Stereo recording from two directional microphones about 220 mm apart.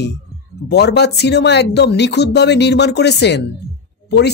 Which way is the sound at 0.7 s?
50° left (ahead or behind).